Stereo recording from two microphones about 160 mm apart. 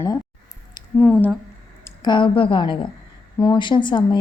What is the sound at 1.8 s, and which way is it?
A woman's voice, 25° left (ahead or behind).